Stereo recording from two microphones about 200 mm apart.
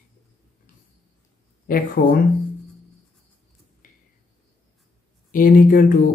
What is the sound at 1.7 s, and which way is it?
Speech, 45° left (ahead or behind).